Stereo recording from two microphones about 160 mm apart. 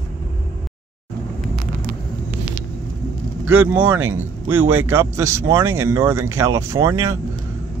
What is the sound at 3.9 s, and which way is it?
Speech, 15° right (ahead or behind).